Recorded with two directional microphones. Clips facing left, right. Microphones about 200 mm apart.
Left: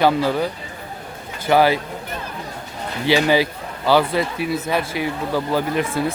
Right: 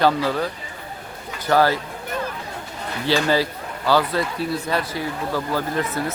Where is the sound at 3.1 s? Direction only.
15° left (ahead or behind).